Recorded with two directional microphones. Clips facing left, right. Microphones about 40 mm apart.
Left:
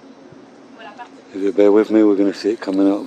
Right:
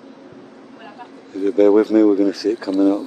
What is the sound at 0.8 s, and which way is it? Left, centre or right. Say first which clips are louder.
Speech: left 3 dB; left.